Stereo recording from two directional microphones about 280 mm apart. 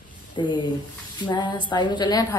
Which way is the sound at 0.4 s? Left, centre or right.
Centre.